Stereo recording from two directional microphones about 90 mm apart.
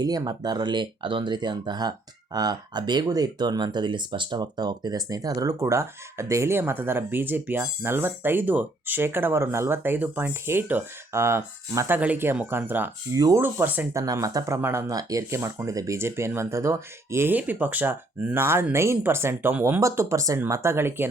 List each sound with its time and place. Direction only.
0.0 s speech: 45° right (ahead or behind); by 11.9 s 30° right (ahead or behind)
11.9 s speech: 20° right (ahead or behind)
13.9 s speech: 40° right (ahead or behind)
14.9 s speech: 40° right (ahead or behind)
17.3 s speech: 20° right (ahead or behind)
19.8 s speech: 35° right (ahead or behind)